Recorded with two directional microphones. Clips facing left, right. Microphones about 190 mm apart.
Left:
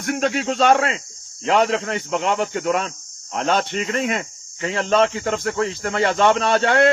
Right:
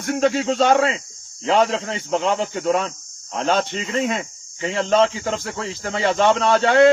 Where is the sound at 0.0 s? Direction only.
65° left (ahead or behind).